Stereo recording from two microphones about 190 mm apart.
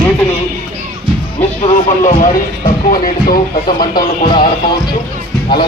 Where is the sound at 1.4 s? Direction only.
35° left (ahead or behind).